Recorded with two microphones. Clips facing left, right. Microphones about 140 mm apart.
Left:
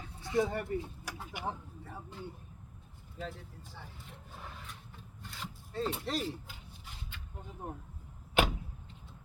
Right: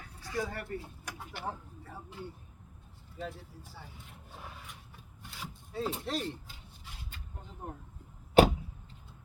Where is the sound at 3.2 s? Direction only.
10° right (ahead or behind).